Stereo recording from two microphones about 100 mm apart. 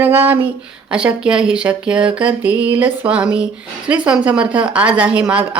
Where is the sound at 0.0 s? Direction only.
20° right (ahead or behind).